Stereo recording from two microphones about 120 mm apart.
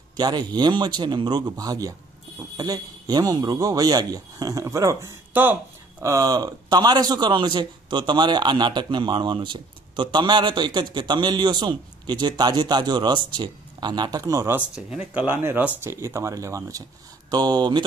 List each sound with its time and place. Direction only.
0.2 s a man's voice: 35° right (ahead or behind)
5.3 s speech: 15° right (ahead or behind)
6.1 s a man's voice: 30° right (ahead or behind)
14.9 s a man's voice: 10° right (ahead or behind); by 17.8 s 35° right (ahead or behind)